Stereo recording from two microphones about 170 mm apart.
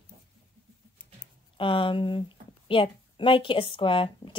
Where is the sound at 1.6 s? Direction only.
30° left (ahead or behind).